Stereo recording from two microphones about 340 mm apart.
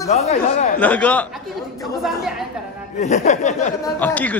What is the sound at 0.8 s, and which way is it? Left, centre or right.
Speech, centre.